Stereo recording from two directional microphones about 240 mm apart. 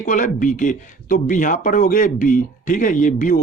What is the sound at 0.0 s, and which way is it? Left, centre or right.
Speech, left.